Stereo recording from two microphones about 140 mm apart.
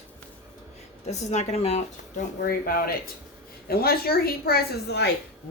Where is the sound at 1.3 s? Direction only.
55° left (ahead or behind).